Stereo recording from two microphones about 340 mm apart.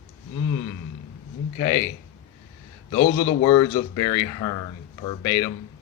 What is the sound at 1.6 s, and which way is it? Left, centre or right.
Speech, left.